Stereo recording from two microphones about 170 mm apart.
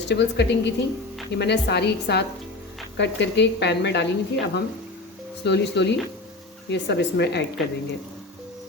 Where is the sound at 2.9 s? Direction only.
90° left.